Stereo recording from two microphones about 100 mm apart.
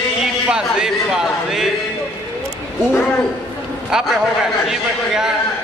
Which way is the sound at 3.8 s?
5° right (ahead or behind).